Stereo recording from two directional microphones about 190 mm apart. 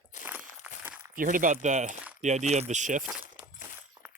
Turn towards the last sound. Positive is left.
turn(degrees=-40)  # may be behind; listen again after turning